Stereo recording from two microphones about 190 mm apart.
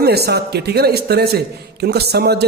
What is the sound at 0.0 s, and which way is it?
A woman's voice, 55° right (ahead or behind).